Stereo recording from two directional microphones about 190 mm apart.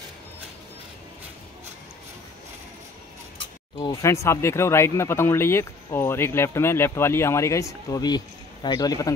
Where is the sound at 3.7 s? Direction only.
15° left (ahead or behind).